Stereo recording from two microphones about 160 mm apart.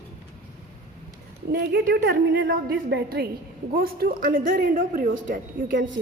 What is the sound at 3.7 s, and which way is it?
Speech, 70° right (ahead or behind).